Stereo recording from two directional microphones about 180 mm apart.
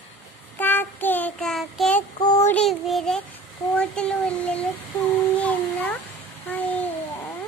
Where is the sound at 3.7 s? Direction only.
5° left (ahead or behind).